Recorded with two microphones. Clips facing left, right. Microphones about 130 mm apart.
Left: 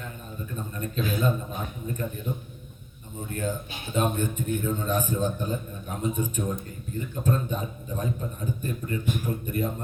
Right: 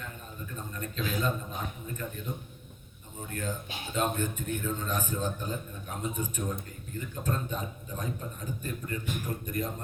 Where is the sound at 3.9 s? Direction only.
15° left (ahead or behind).